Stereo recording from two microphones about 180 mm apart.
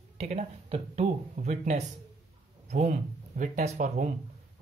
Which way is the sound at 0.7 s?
40° right (ahead or behind).